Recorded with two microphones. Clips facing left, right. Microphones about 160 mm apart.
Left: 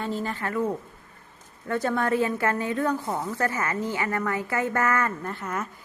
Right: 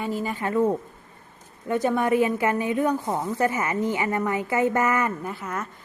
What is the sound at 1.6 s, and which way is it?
A woman's voice, 15° right (ahead or behind).